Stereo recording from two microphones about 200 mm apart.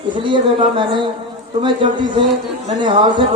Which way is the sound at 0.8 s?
25° right (ahead or behind).